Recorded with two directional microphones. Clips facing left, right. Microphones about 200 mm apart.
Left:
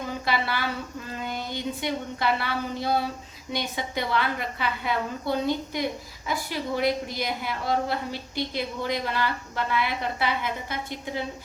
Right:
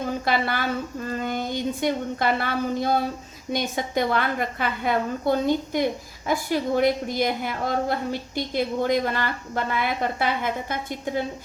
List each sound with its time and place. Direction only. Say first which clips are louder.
0.3 s a woman's voice: right 2 dB; 50° right (ahead or behind)